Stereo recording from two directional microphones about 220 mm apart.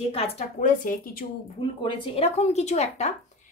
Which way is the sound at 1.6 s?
20° left (ahead or behind).